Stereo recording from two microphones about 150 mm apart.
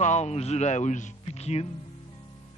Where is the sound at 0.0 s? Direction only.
50° left (ahead or behind).